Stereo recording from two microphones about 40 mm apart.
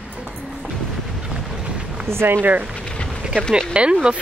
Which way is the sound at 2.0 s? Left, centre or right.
Right.